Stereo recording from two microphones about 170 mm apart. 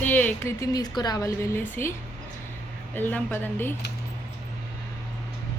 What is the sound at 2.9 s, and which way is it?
Speech, 10° left (ahead or behind).